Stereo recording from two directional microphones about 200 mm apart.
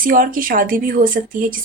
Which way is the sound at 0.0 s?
45° right (ahead or behind).